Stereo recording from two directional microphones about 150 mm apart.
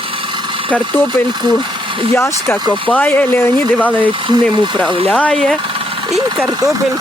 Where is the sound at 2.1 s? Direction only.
15° left (ahead or behind).